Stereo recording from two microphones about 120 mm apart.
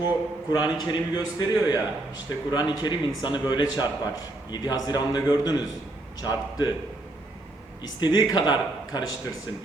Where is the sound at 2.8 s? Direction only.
35° left (ahead or behind).